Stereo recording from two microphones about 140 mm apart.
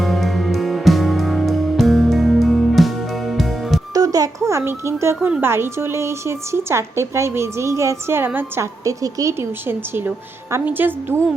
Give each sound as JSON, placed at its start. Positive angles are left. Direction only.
{"t": 0.0, "sound": "music", "side_deg": 0}
{"t": 3.9, "sound": "a sound", "side_deg": -25}
{"t": 5.4, "sound": "a woman's voice", "side_deg": -15}